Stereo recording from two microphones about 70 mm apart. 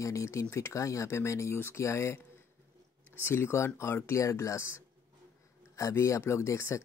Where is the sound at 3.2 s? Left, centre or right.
Left.